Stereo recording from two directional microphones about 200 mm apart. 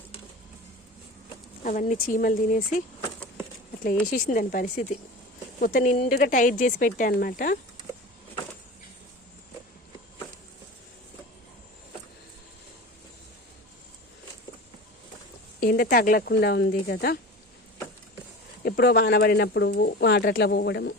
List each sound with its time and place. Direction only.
1.6 s speech: 40° left (ahead or behind)
4.1 s speech: 45° left (ahead or behind)
15.6 s speech: 45° left (ahead or behind)
18.6 s speech: 55° left (ahead or behind)